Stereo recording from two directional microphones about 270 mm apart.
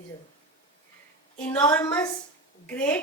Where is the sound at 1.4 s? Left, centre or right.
Centre.